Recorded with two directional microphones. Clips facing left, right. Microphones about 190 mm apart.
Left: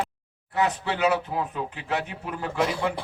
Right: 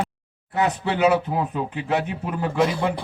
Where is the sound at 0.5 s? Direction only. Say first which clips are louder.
Right 3 dB; 20° right (ahead or behind).